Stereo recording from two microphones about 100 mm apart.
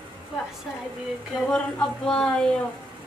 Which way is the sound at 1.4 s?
10° left (ahead or behind).